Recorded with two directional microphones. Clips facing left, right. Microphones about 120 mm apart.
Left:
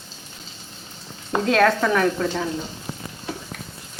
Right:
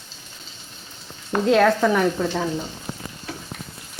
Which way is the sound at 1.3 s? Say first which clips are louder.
Right 1 dB; centre (ahead or behind).